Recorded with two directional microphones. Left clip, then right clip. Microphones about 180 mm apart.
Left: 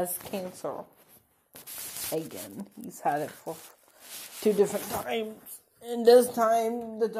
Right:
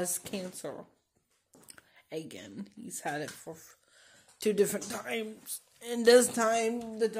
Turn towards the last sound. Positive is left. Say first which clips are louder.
# left 2 dB
turn(degrees=-5)  # may be behind; listen again after turning